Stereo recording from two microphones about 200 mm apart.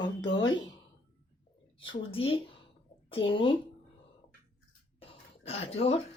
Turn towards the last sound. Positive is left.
turn(degrees=30)  # may be behind; listen again after turning